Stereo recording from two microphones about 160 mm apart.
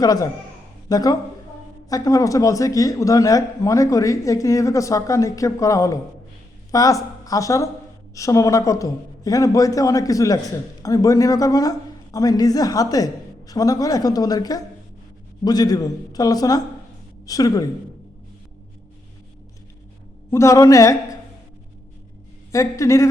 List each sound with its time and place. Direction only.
0.0 s speech: 25° left (ahead or behind)
20.3 s speech: 20° left (ahead or behind)
22.5 s speech: 20° left (ahead or behind)